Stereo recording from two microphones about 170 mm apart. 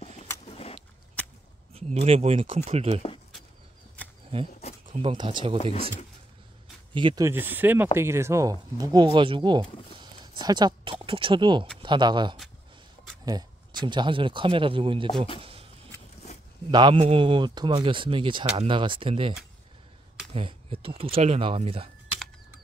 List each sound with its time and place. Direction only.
0.5 s a sound: 35° left (ahead or behind)
1.7 s speech: 35° right (ahead or behind)
5.0 s speech: 25° right (ahead or behind)
6.9 s speech: 30° right (ahead or behind)
7.2 s speech: 10° right (ahead or behind); by 15.0 s 30° right (ahead or behind)
16.7 s speech: 30° right (ahead or behind)
20.3 s speech: 35° right (ahead or behind)